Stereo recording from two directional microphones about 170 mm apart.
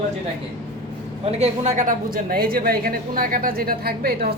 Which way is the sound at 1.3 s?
40° right (ahead or behind).